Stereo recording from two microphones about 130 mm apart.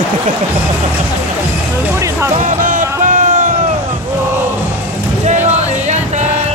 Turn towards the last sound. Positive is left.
turn(degrees=-65)  # may be behind; listen again after turning